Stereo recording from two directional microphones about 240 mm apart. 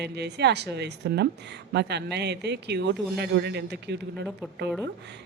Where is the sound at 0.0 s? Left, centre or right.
Right.